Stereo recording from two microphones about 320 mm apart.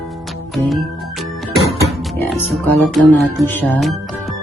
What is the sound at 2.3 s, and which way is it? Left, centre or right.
Speech, centre.